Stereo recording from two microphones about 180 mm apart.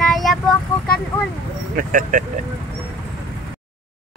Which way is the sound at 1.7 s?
50° right (ahead or behind).